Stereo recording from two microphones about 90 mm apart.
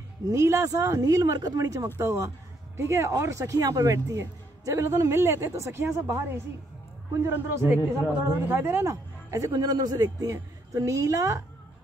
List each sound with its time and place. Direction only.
0.3 s speech: 35° right (ahead or behind)
2.0 s a man's voice: 35° right (ahead or behind)